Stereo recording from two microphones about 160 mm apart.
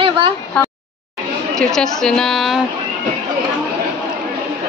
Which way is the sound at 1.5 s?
5° left (ahead or behind).